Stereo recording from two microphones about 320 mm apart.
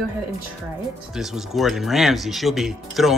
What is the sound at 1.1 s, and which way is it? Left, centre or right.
Speech, centre.